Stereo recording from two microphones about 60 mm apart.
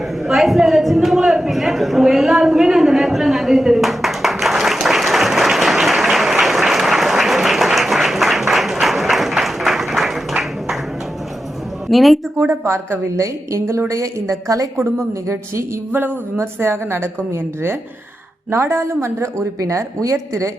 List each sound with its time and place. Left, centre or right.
0.2 s a sound: centre
11.9 s a woman's voice: centre
12.4 s a woman's voice: right
15.3 s a woman's voice: right
15.9 s speech: right
16.4 s a woman's voice: right
19.5 s a woman's voice: right